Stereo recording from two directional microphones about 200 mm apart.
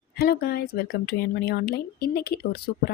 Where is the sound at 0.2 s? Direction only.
50° left (ahead or behind).